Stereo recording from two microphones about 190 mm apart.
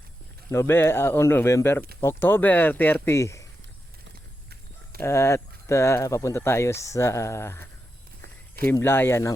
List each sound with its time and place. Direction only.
0.5 s speech: 15° left (ahead or behind)
4.9 s speech: 15° left (ahead or behind)
8.2 s a sound: 50° right (ahead or behind)
8.7 s speech: 10° left (ahead or behind)